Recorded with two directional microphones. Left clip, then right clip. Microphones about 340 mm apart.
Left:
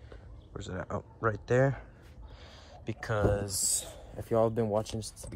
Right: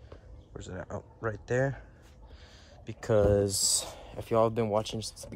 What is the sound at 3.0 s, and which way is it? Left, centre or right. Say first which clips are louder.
Speech: right 6 dB; right.